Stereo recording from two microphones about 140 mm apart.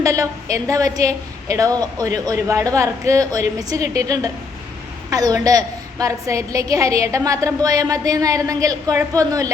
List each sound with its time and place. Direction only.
0.0 s a woman's voice: 25° right (ahead or behind)